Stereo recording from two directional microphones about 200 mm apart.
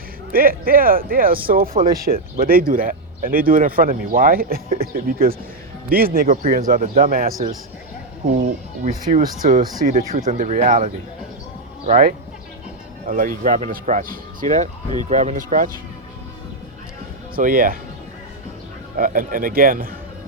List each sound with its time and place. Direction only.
0.3 s speech: 45° right (ahead or behind)
8.8 s speech: 35° right (ahead or behind)
17.3 s speech: 45° right (ahead or behind)
18.9 s speech: 45° right (ahead or behind)